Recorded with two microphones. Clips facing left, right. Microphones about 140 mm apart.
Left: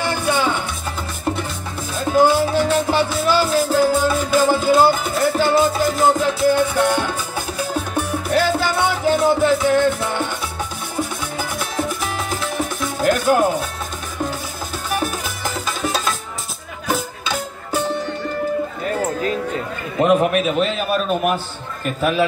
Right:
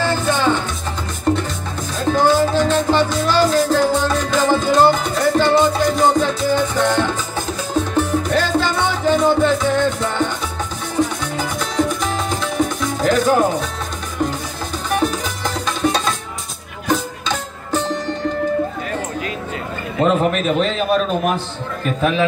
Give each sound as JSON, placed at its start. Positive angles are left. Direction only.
{"t": 0.0, "sound": "music", "side_deg": 10}
{"t": 15.0, "sound": "music", "side_deg": 5}
{"t": 20.0, "sound": "a man's voice", "side_deg": 10}